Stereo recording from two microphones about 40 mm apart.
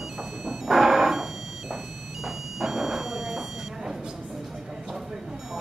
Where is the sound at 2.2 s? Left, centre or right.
Centre.